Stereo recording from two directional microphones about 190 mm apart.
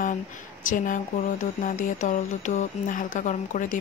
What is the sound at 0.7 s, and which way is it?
Speech, 45° left (ahead or behind).